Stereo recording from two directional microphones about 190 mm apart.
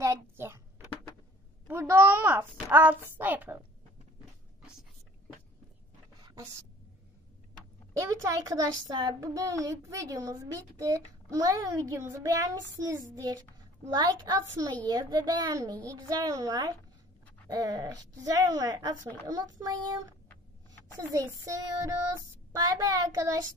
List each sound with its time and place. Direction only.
0.0 s a sound: 15° right (ahead or behind)
8.0 s a child's voice: 15° right (ahead or behind)
21.1 s a child's voice: 20° right (ahead or behind)